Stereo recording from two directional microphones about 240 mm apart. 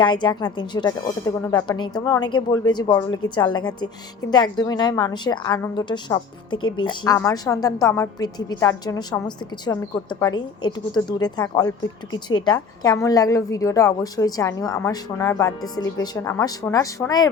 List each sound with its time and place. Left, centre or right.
0.0 s a woman's voice: centre